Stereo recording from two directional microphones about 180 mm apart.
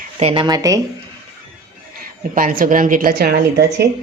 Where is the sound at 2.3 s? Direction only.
50° right (ahead or behind).